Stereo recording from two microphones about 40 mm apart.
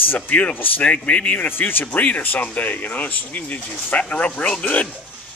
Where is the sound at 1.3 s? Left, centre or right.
Left.